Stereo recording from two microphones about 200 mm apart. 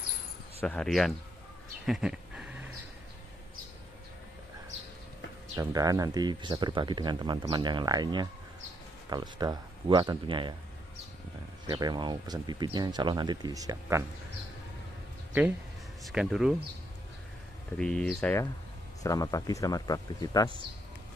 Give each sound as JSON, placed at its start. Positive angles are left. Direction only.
{"t": 0.6, "sound": "speech", "side_deg": 5}
{"t": 1.9, "sound": "a sound", "side_deg": -5}
{"t": 5.6, "sound": "speech", "side_deg": -20}
{"t": 11.6, "sound": "speech", "side_deg": -20}
{"t": 16.1, "sound": "speech", "side_deg": 0}
{"t": 17.7, "sound": "speech", "side_deg": 5}